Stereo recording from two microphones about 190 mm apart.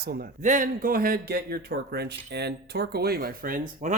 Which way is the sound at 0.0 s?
55° right (ahead or behind).